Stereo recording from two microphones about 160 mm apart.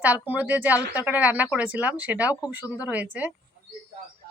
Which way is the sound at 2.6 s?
20° left (ahead or behind).